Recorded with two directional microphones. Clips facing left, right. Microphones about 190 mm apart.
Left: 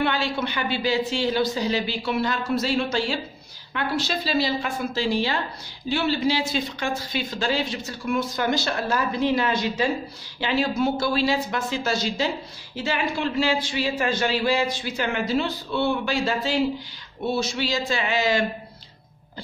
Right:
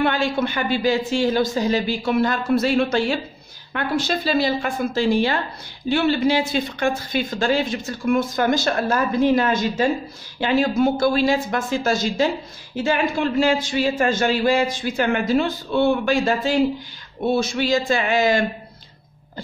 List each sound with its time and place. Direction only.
0.0 s speech: 50° right (ahead or behind)